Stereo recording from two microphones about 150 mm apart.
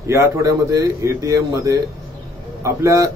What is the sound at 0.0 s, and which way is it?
A man's voice, 20° right (ahead or behind).